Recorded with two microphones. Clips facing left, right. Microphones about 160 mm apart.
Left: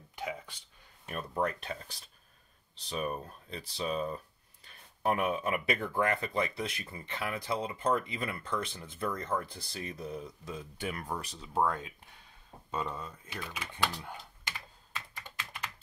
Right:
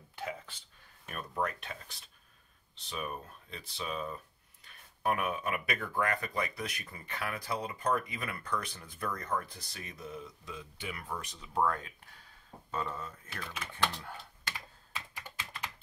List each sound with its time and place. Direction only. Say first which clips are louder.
0.1 s a sound: left 1 dB; 15° left (ahead or behind)
1.4 s speech: left 2 dB; 35° left (ahead or behind)
11.5 s speech: left 1 dB; 20° left (ahead or behind)